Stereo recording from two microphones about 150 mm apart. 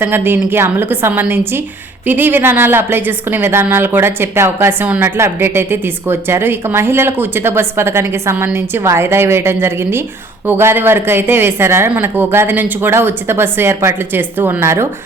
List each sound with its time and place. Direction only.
0.0 s a woman's voice: 15° right (ahead or behind)